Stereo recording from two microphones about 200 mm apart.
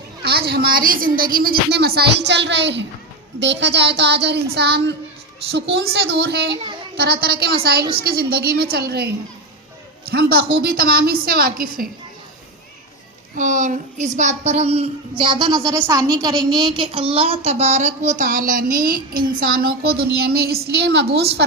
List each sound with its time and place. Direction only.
0.2 s a woman's voice: 50° right (ahead or behind)
13.3 s a woman's voice: 40° right (ahead or behind)